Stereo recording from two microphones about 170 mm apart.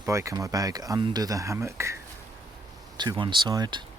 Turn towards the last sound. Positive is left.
turn(degrees=-25)  # may be behind; listen again after turning